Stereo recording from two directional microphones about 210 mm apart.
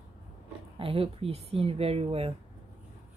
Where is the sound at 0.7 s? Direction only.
25° right (ahead or behind).